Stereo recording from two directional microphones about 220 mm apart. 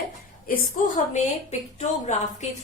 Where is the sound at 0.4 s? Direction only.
40° left (ahead or behind).